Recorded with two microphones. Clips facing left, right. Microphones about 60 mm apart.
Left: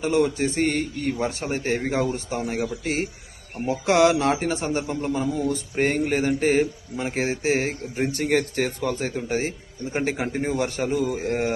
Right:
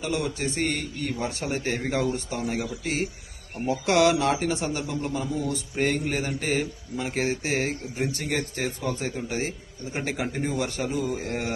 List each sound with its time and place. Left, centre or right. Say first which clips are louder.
0.0 s speech: left 7 dB; left
7.9 s speech: left 8 dB; left
10.8 s a man's voice: left 4 dB; left
11.2 s speech: left 5 dB; left